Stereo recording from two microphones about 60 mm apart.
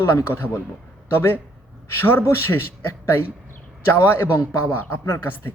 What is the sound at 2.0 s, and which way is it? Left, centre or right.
Speech, left.